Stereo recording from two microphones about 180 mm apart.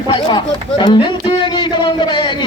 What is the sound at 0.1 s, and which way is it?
A man's voice, 25° left (ahead or behind).